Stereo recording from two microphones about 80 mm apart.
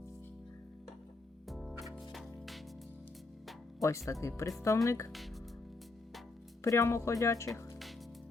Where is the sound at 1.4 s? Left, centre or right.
Centre.